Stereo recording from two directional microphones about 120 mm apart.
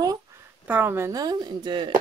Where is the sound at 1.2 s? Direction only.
35° right (ahead or behind).